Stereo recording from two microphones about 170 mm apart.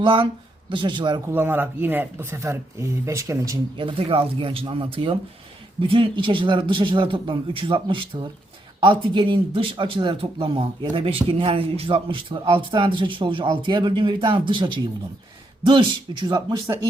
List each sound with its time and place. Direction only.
0.0 s speech: 30° right (ahead or behind)
1.3 s speech: 10° right (ahead or behind)
3.8 s speech: 30° right (ahead or behind)